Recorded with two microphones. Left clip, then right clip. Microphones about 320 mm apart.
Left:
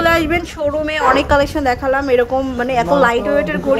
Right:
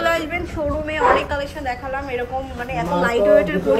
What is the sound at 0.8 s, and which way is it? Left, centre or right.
Speech, centre.